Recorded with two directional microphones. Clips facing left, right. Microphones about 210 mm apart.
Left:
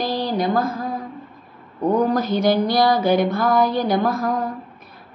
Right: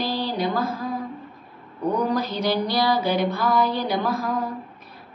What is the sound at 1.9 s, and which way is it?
A woman's voice, 50° left (ahead or behind).